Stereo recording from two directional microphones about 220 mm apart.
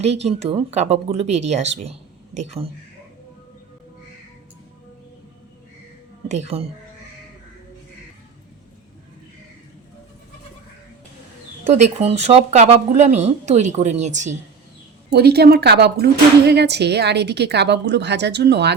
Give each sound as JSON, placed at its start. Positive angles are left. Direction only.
{"t": 0.0, "sound": "speech", "side_deg": -30}
{"t": 6.2, "sound": "speech", "side_deg": -30}
{"t": 11.7, "sound": "speech", "side_deg": -30}
{"t": 15.1, "sound": "a woman's voice", "side_deg": -45}